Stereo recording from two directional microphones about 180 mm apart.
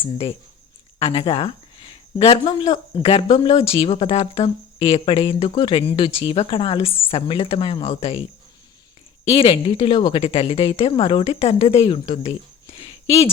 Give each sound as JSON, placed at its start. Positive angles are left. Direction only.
{"t": 0.0, "sound": "a woman's voice", "side_deg": 30}
{"t": 9.2, "sound": "a woman's voice", "side_deg": 30}